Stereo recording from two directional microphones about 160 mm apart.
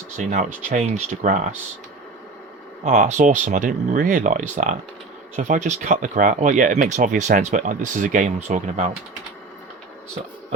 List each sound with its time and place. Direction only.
0.2 s speech: 45° right (ahead or behind)
2.9 s speech: 55° right (ahead or behind)